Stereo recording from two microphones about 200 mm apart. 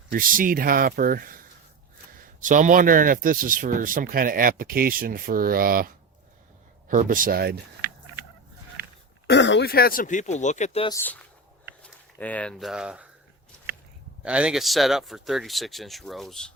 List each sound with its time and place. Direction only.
0.1 s speech: 45° right (ahead or behind)
2.4 s speech: 40° right (ahead or behind)
9.3 s speech: 60° left (ahead or behind); by 10.9 s 30° left (ahead or behind)
10.9 s speech: 10° left (ahead or behind)
14.3 s speech: 5° right (ahead or behind)